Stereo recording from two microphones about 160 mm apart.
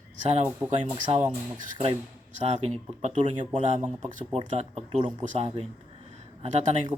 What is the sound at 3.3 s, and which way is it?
Speech, 40° right (ahead or behind).